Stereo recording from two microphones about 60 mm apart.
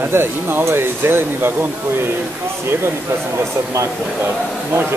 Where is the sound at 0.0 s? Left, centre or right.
Right.